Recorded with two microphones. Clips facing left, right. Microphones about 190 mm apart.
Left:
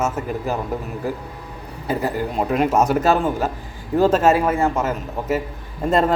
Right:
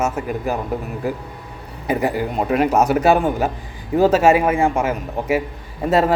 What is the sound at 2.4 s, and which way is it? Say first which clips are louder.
A man's voice: right 1 dB; centre (ahead or behind).